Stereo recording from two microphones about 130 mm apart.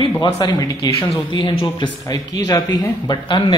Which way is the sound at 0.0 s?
35° left (ahead or behind).